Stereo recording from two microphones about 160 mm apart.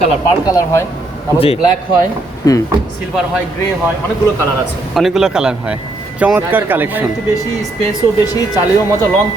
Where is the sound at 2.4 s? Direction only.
20° left (ahead or behind).